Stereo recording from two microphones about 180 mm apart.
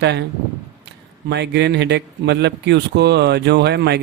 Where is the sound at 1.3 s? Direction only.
70° right (ahead or behind).